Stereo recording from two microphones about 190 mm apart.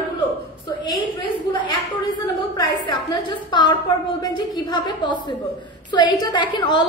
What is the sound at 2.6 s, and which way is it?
A woman's voice, 25° left (ahead or behind).